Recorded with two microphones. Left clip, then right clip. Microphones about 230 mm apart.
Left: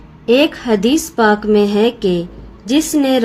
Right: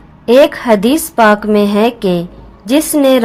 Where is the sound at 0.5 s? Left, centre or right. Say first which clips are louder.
Right 4 dB; right.